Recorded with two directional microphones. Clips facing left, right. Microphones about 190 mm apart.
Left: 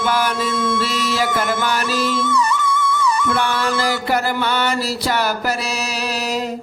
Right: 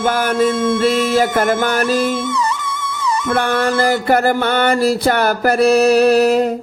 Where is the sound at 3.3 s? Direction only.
50° right (ahead or behind).